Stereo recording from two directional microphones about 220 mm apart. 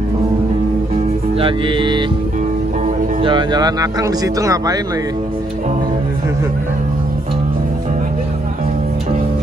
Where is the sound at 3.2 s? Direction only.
20° right (ahead or behind).